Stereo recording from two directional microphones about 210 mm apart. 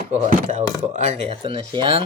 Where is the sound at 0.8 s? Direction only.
35° right (ahead or behind).